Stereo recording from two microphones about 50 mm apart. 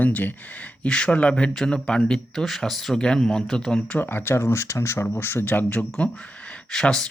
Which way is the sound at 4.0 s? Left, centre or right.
Left.